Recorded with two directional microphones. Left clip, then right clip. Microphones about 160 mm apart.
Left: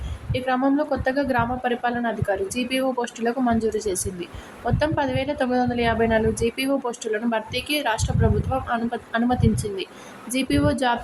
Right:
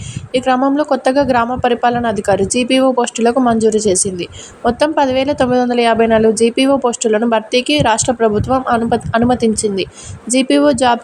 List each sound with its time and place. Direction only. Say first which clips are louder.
0.3 s a woman's voice: right 9 dB; 35° right (ahead or behind)